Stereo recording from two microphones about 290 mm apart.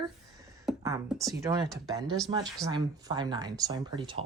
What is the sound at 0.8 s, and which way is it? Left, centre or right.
Speech, centre.